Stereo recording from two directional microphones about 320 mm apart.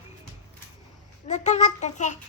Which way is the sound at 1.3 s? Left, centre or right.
Left.